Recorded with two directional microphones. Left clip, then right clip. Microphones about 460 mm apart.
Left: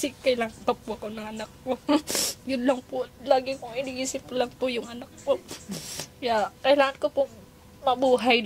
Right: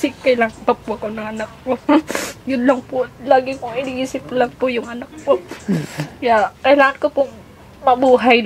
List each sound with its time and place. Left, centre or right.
0.0 s speech: left